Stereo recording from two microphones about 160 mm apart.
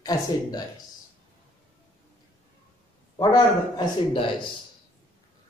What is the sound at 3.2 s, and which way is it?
A man's voice, 30° left (ahead or behind).